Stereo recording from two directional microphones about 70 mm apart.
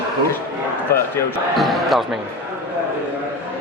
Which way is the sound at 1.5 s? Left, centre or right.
Centre.